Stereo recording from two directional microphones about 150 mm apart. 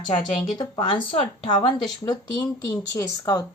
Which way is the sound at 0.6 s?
30° left (ahead or behind).